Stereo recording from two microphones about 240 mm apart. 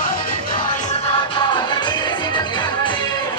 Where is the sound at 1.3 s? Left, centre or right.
Centre.